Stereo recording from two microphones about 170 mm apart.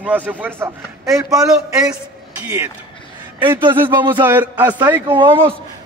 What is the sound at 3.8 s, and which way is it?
Speech, 25° right (ahead or behind).